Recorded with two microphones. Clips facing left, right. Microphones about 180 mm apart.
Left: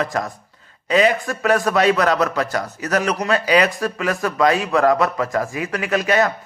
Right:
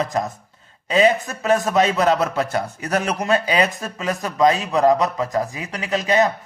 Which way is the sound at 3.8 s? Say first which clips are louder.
Left 4 dB; 20° right (ahead or behind).